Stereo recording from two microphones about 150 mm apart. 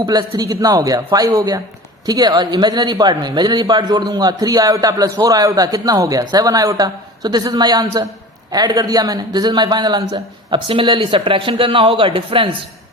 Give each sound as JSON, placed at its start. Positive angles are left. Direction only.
{"t": 0.0, "sound": "a man's voice", "side_deg": -25}